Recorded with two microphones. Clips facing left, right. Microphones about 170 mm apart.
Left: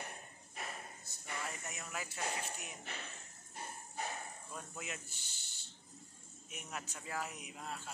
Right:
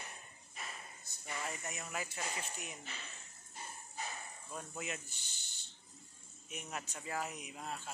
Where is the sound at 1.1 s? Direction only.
5° left (ahead or behind).